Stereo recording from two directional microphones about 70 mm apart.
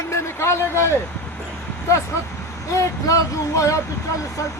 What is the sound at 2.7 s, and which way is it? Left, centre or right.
Speech, left.